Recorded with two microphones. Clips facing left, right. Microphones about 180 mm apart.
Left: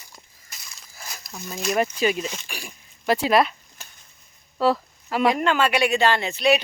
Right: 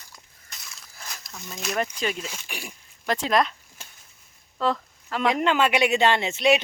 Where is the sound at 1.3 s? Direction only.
15° left (ahead or behind).